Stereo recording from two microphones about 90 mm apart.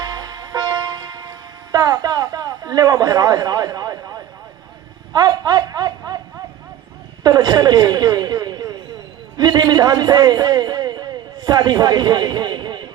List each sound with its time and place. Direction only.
0.0 s music: 50° right (ahead or behind)
5.1 s a sound: 50° right (ahead or behind)
7.2 s a man's voice: 50° right (ahead or behind)